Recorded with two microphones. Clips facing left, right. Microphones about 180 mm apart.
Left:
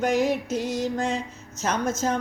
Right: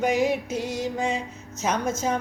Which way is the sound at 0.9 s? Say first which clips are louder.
Even; 10° right (ahead or behind).